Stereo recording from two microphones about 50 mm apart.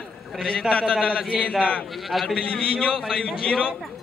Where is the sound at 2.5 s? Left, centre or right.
Left.